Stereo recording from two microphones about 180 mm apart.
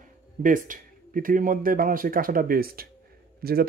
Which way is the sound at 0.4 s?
50° right (ahead or behind).